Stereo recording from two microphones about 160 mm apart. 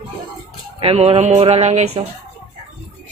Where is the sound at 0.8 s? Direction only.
40° right (ahead or behind).